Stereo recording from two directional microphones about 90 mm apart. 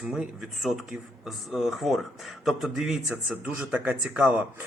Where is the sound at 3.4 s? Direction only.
15° right (ahead or behind).